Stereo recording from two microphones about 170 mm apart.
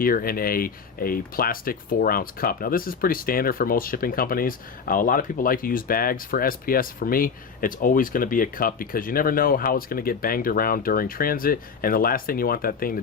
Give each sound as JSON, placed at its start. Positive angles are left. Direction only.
{"t": 0.0, "sound": "speech", "side_deg": 60}